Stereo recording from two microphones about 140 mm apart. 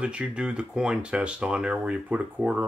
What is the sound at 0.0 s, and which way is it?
Speech, 10° right (ahead or behind).